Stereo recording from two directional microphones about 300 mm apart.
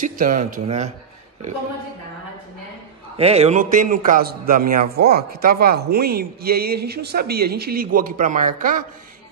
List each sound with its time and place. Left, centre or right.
0.0 s a man's voice: right
3.2 s a man's voice: right